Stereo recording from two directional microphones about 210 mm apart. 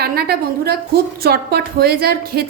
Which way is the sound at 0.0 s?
50° right (ahead or behind).